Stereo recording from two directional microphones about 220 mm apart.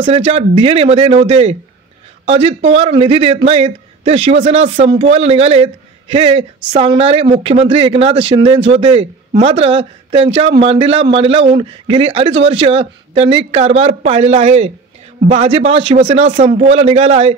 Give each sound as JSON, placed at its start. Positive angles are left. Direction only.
{"t": 0.0, "sound": "a man's voice", "side_deg": -25}
{"t": 8.5, "sound": "speech", "side_deg": -55}
{"t": 8.8, "sound": "a man's voice", "side_deg": -30}